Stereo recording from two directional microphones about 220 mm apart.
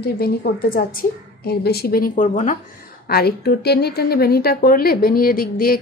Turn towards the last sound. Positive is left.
turn(degrees=40)  # may be behind; listen again after turning